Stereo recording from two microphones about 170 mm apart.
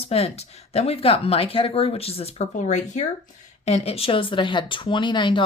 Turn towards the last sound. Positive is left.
turn(degrees=30)  # may be behind; listen again after turning